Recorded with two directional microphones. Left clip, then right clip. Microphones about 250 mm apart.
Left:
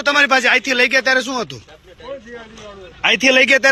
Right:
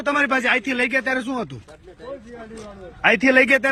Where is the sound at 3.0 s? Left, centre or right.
Centre.